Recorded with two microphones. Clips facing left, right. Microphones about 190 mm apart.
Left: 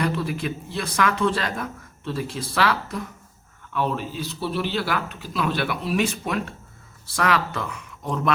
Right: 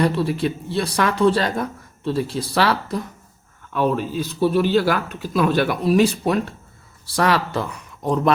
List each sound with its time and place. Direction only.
0.0 s a man's voice: 35° right (ahead or behind)